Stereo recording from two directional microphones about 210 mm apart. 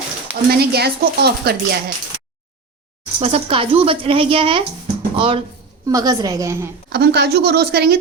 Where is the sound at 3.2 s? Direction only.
25° right (ahead or behind).